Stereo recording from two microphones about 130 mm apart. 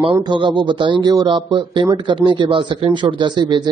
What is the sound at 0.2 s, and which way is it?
Speech, 35° right (ahead or behind).